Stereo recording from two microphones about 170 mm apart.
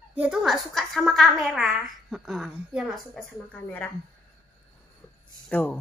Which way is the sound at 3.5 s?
10° left (ahead or behind).